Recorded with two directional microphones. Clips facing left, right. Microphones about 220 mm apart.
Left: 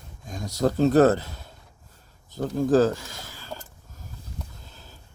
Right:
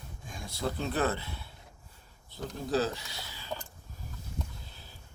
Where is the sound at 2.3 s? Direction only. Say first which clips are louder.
Left 11 dB; 45° left (ahead or behind).